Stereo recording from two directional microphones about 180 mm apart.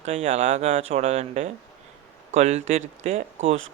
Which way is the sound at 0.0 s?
40° right (ahead or behind).